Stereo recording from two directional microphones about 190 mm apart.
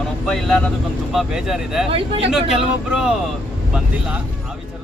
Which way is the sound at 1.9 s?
30° right (ahead or behind).